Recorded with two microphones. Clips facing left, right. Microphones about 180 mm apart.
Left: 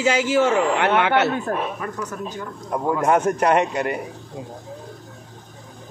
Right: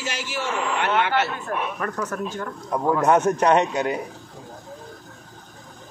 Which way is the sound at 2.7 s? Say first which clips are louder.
Even; 5° left (ahead or behind).